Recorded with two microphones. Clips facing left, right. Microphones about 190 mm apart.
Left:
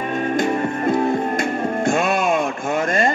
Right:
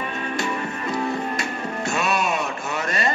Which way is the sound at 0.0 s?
45° left (ahead or behind).